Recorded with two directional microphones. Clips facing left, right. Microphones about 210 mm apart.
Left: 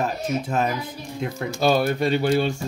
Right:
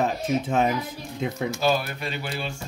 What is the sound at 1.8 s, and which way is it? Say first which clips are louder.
Speech: left 12 dB; 45° left (ahead or behind).